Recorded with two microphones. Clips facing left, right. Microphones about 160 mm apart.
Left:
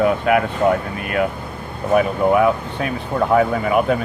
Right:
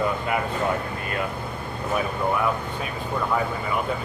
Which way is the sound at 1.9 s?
75° left (ahead or behind).